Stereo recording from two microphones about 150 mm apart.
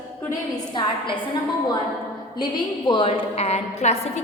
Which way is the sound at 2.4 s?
30° left (ahead or behind).